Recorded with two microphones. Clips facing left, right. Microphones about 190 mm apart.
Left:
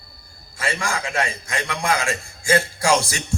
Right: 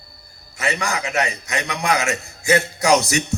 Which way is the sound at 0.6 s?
20° right (ahead or behind).